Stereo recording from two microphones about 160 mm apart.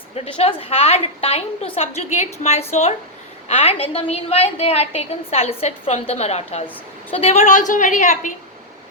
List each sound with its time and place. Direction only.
0.2 s a woman's voice: 40° left (ahead or behind)